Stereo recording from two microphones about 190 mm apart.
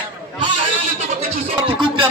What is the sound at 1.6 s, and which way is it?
Music, 25° right (ahead or behind).